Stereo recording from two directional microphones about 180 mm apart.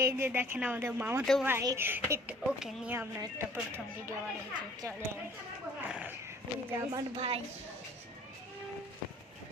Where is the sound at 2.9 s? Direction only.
15° right (ahead or behind).